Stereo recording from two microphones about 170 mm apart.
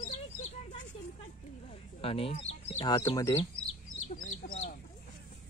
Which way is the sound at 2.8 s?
25° left (ahead or behind).